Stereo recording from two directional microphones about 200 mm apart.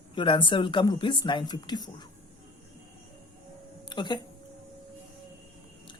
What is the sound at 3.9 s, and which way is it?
Speech, 20° left (ahead or behind).